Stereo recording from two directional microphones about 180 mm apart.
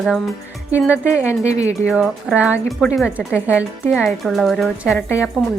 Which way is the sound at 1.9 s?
5° right (ahead or behind).